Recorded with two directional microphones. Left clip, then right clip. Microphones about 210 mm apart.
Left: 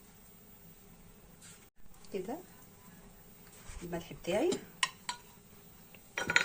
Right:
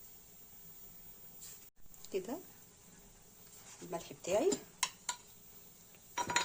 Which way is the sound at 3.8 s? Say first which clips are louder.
Left 1 dB; 55° right (ahead or behind).